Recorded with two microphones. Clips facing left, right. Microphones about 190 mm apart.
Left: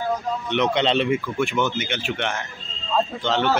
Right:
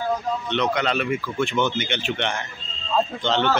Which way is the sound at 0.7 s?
25° left (ahead or behind).